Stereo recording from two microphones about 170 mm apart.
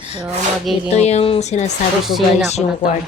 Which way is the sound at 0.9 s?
40° left (ahead or behind).